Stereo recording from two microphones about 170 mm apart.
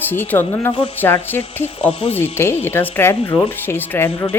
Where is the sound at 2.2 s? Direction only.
15° left (ahead or behind).